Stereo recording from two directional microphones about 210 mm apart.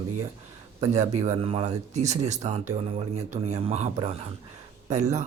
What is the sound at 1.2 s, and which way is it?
Speech, 30° right (ahead or behind).